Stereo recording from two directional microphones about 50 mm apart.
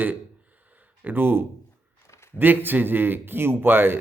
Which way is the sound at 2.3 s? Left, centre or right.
Right.